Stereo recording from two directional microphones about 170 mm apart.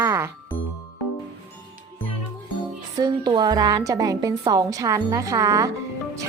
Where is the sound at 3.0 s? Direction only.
25° right (ahead or behind).